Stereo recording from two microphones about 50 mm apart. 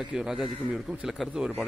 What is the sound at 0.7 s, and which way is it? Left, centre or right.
Speech, right.